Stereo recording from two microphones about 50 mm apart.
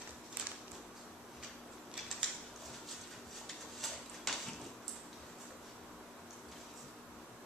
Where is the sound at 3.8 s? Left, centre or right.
Centre.